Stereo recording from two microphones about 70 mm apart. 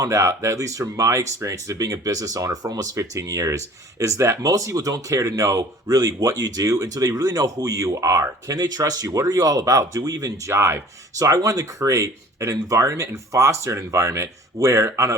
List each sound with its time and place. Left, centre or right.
0.0 s speech: right
10.5 s speech: right
11.2 s speech: right